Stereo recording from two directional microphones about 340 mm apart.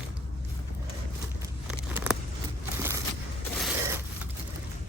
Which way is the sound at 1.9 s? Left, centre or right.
Centre.